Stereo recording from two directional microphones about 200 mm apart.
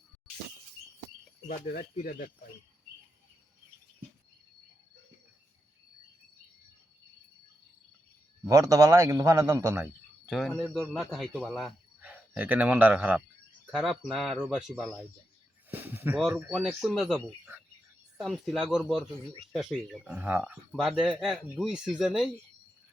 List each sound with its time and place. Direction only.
1.5 s speech: 45° left (ahead or behind)
8.4 s a man's voice: 15° right (ahead or behind)
10.2 s speech: centre (ahead or behind)